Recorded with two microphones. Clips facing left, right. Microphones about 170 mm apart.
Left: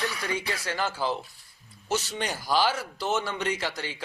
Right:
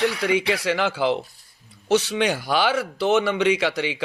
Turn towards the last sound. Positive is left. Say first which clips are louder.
# right 9 dB
turn(degrees=-70)  # may be behind; listen again after turning